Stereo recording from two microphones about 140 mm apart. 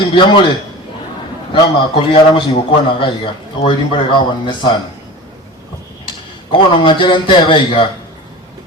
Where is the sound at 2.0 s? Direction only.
40° left (ahead or behind).